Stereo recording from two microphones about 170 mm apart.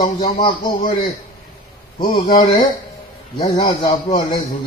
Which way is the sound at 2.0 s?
25° left (ahead or behind).